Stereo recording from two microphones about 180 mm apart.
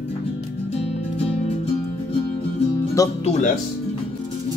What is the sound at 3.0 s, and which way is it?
Speech, 20° left (ahead or behind).